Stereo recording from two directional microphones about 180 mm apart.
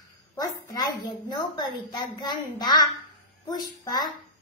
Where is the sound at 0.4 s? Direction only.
20° left (ahead or behind).